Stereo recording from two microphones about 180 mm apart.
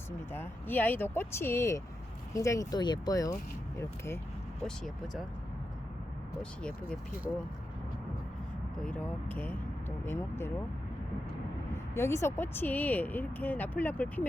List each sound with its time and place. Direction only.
0.3 s speech: 10° left (ahead or behind)
4.6 s speech: 5° left (ahead or behind)
6.4 s speech: 5° left (ahead or behind)
8.8 s speech: 10° left (ahead or behind)
11.9 s speech: 15° left (ahead or behind)